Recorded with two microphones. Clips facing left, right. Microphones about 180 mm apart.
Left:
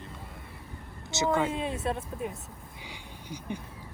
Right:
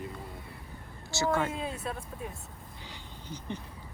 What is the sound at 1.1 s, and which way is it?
Speech, 20° left (ahead or behind).